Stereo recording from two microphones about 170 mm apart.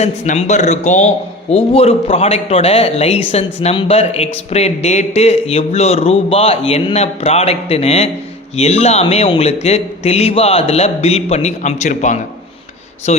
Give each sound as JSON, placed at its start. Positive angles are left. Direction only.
{"t": 0.0, "sound": "a man's voice", "side_deg": 40}